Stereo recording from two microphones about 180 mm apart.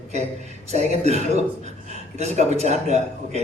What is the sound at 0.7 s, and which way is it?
A man's voice, 40° right (ahead or behind).